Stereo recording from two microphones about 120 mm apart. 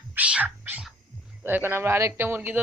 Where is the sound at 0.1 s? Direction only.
10° right (ahead or behind).